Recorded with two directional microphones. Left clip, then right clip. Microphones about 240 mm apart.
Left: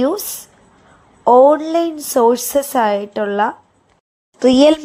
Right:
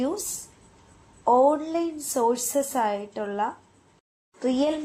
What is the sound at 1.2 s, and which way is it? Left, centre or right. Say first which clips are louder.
Speech: left 10 dB; left.